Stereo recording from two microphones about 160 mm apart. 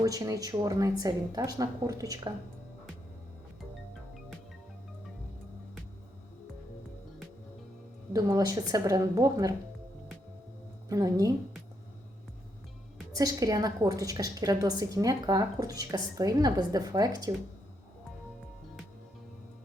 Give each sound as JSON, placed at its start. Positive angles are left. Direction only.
{"t": 0.0, "sound": "a woman's voice", "side_deg": -20}
{"t": 8.1, "sound": "a woman's voice", "side_deg": -20}
{"t": 10.8, "sound": "a woman's voice", "side_deg": -20}
{"t": 13.1, "sound": "a woman's voice", "side_deg": -25}